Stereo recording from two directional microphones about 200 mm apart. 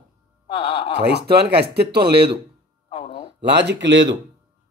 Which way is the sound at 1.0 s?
55° right (ahead or behind).